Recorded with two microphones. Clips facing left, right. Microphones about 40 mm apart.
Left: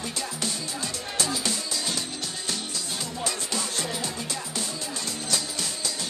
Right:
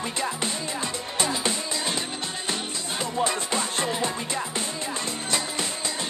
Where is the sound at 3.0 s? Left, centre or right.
Right.